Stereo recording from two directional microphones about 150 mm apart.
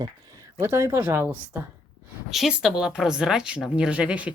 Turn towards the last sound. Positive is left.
turn(degrees=-10)  # may be behind; listen again after turning